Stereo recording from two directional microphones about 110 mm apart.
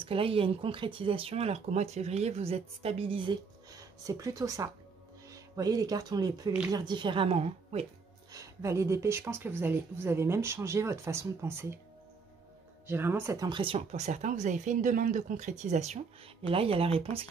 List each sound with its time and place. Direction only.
0.0 s speech: 55° right (ahead or behind)
3.7 s a woman's voice: 35° right (ahead or behind); by 7.8 s 65° right (ahead or behind)
8.3 s speech: 30° right (ahead or behind)
12.8 s speech: 20° right (ahead or behind)
13.5 s a woman's voice: 50° right (ahead or behind)
13.7 s speech: 90° right
16.4 s speech: 55° right (ahead or behind)